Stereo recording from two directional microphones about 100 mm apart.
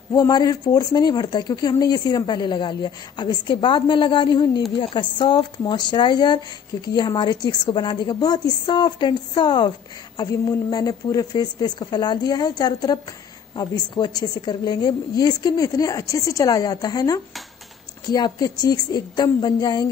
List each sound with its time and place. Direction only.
0.1 s speech: 40° left (ahead or behind)
10.1 s a woman's voice: 40° left (ahead or behind)